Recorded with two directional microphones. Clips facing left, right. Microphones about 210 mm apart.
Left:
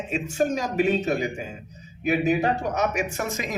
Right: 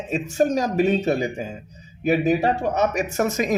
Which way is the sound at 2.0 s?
40° right (ahead or behind).